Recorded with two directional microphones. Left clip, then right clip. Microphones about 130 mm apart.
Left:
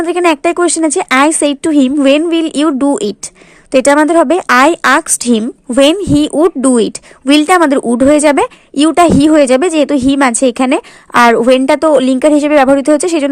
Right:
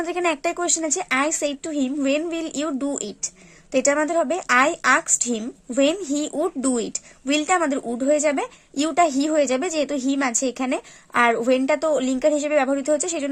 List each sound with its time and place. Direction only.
0.0 s a woman's voice: 35° left (ahead or behind)